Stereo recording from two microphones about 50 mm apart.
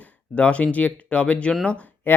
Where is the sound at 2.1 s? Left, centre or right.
Left.